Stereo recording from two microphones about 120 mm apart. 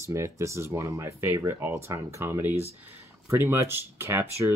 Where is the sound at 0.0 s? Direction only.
25° right (ahead or behind).